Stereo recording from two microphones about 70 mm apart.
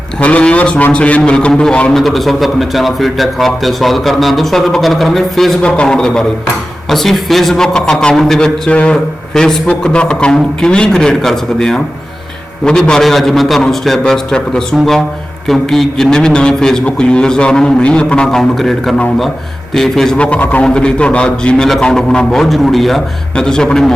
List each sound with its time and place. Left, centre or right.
0.2 s a man's voice: centre